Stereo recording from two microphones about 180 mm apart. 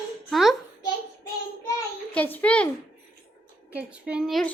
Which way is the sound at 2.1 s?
10° left (ahead or behind).